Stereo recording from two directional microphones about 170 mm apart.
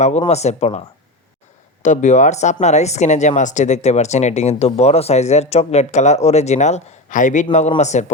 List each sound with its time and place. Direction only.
0.3 s speech: 40° left (ahead or behind)
1.8 s a man's voice: 45° left (ahead or behind)